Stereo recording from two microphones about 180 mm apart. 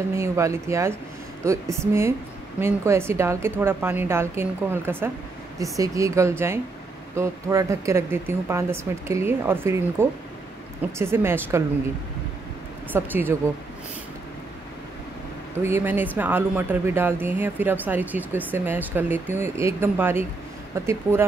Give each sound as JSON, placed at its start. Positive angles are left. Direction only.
{"t": 0.1, "sound": "speech", "side_deg": -15}
{"t": 12.9, "sound": "speech", "side_deg": -10}
{"t": 15.5, "sound": "speech", "side_deg": -10}